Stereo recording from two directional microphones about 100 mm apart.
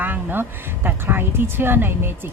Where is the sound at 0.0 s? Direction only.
20° right (ahead or behind).